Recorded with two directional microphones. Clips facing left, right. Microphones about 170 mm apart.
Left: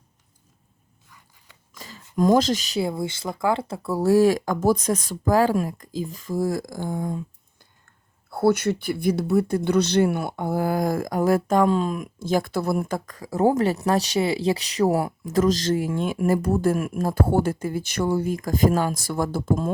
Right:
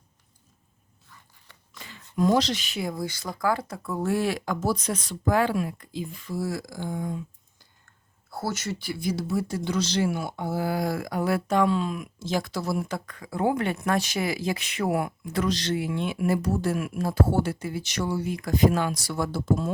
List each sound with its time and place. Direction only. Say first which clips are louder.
1.8 s speech: left 3 dB; 40° left (ahead or behind)
8.3 s speech: left 11 dB; 60° left (ahead or behind)